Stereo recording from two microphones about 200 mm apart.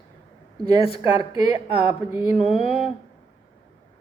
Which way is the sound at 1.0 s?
20° right (ahead or behind).